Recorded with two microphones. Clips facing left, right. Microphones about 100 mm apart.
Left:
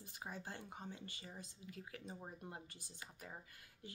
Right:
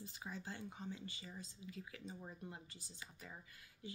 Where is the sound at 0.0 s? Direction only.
50° left (ahead or behind).